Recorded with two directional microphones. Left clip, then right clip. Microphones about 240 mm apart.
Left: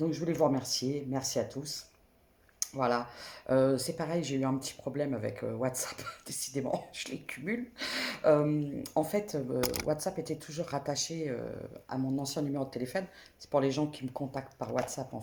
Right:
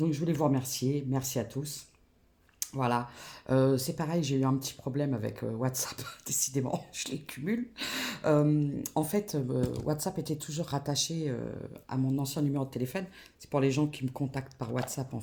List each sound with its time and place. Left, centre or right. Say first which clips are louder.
0.0 s speech: left 1 dB; right